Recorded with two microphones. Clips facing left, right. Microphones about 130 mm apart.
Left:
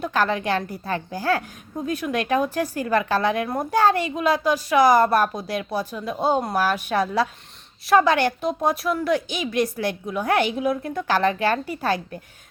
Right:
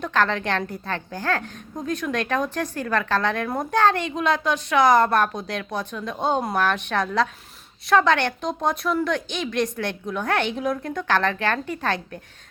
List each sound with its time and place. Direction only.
0.0 s a woman's voice: 10° left (ahead or behind)